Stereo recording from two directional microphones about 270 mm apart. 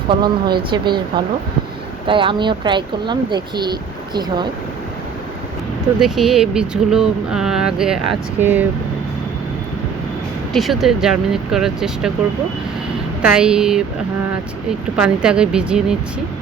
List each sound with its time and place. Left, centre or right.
0.1 s speech: centre
6.0 s speech: centre
10.5 s speech: centre
13.2 s speech: centre
14.9 s speech: centre